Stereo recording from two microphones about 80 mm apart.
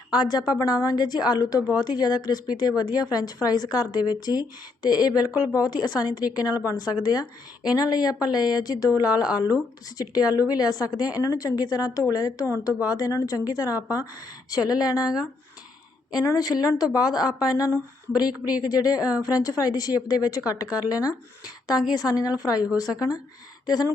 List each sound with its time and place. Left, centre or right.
0.1 s a woman's voice: left
16.1 s a woman's voice: left